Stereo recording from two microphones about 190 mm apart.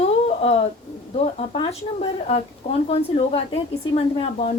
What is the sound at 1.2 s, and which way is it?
Speech, 35° left (ahead or behind).